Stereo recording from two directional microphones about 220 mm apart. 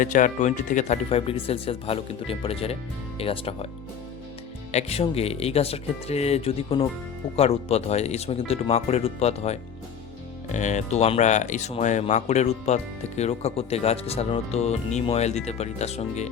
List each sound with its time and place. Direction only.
0.0 s speech: 35° left (ahead or behind)
4.7 s speech: 30° left (ahead or behind)